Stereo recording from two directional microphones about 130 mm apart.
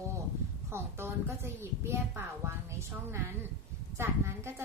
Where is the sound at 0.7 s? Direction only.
20° right (ahead or behind).